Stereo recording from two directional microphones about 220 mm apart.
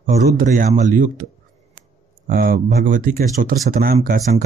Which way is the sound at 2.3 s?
40° right (ahead or behind).